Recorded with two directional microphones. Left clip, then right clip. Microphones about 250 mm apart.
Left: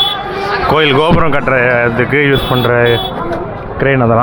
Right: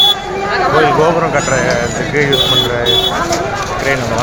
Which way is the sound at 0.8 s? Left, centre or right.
Left.